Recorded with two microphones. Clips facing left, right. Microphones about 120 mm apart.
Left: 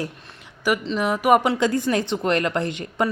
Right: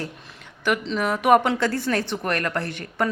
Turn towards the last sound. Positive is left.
turn(degrees=15)  # may be behind; listen again after turning